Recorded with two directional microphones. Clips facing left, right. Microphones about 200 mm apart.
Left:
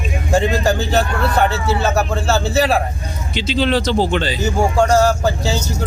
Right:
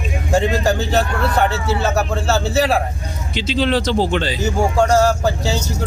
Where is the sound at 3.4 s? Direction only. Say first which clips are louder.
Left 1 dB; 5° left (ahead or behind).